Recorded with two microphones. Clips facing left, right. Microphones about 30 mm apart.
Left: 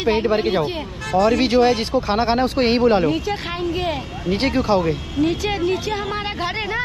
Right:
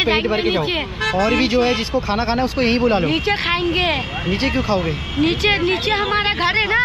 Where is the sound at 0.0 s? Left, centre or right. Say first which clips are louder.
Right 1 dB; right.